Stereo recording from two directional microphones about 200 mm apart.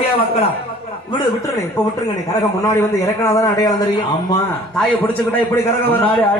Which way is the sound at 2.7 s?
15° left (ahead or behind).